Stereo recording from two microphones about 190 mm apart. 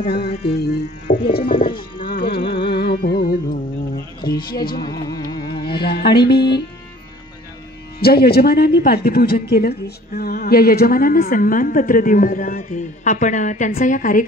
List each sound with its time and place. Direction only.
0.0 s speech: 55° left (ahead or behind)
1.0 s speech: 40° left (ahead or behind)
1.3 s speech: 50° left (ahead or behind)
2.0 s carnatic music: 50° left (ahead or behind)
4.2 s speech: 20° left (ahead or behind)
4.7 s music: 20° left (ahead or behind)
5.7 s speech: 55° left (ahead or behind)
8.0 s speech: 55° left (ahead or behind)